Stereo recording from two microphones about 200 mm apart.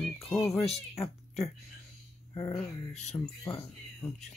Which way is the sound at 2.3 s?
15° left (ahead or behind).